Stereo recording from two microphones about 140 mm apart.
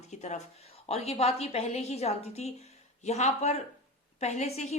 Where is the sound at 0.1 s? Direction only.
55° left (ahead or behind).